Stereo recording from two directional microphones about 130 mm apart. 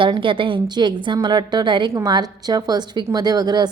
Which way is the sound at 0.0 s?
40° right (ahead or behind).